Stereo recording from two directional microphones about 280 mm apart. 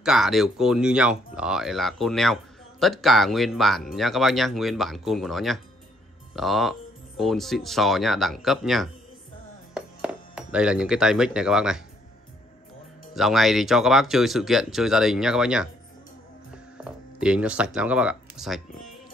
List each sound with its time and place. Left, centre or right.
0.0 s speech: centre
13.1 s speech: centre
16.7 s speech: centre